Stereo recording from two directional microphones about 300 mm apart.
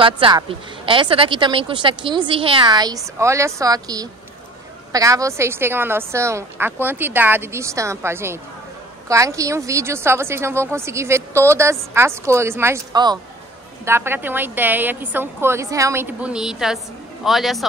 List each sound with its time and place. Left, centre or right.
0.0 s speech: centre